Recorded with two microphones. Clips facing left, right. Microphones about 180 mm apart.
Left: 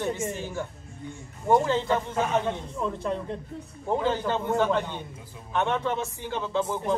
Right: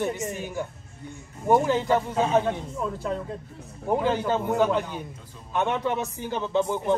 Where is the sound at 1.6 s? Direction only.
15° right (ahead or behind).